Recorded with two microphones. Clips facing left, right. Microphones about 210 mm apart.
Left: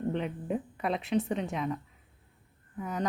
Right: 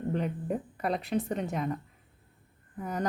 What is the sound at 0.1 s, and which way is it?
Speech, centre (ahead or behind).